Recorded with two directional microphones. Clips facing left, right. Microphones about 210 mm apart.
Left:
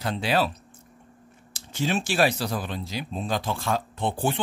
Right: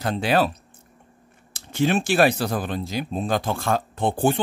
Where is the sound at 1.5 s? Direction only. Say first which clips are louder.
Right 5 dB; 60° right (ahead or behind).